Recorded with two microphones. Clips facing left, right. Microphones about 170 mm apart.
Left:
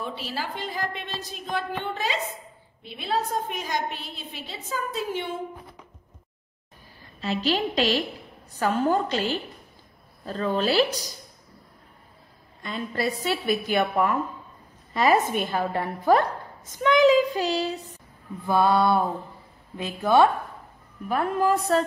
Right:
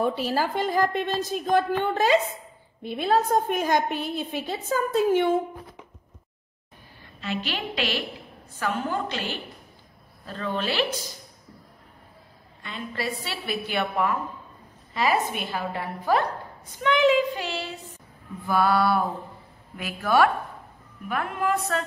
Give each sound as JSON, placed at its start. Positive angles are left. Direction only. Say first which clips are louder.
{"t": 0.0, "sound": "a woman's voice", "louder": "right 8 dB", "side_deg": -45}
{"t": 7.2, "sound": "a woman's voice", "louder": "left 5 dB", "side_deg": 40}
{"t": 12.6, "sound": "a woman's voice", "louder": "left 4 dB", "side_deg": 40}
{"t": 18.5, "sound": "a sound", "louder": "left 1 dB", "side_deg": 20}
{"t": 21.1, "sound": "a woman's voice", "louder": "left 4 dB", "side_deg": 35}